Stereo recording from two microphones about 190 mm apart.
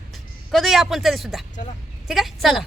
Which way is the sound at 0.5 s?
Centre (ahead or behind).